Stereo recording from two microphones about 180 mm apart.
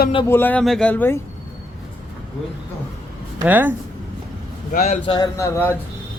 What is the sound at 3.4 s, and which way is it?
Speech, 10° right (ahead or behind).